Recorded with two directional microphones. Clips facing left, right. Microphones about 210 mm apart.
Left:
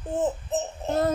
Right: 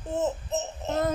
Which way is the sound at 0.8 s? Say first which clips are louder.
Left 3 dB; 30° left (ahead or behind).